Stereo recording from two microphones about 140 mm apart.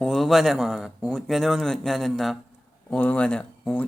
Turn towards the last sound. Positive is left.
turn(degrees=10)  # may be behind; listen again after turning